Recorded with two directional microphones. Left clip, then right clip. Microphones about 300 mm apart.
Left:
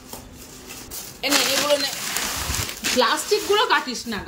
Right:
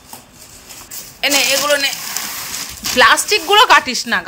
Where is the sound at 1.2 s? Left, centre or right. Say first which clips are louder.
Right 6 dB; centre.